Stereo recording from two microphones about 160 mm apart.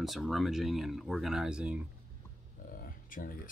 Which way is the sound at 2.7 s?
60° left (ahead or behind).